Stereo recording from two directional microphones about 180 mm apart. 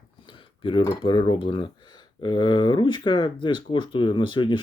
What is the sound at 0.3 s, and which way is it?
Speech, 25° left (ahead or behind).